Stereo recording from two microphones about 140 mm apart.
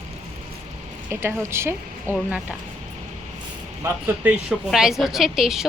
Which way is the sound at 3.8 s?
10° right (ahead or behind).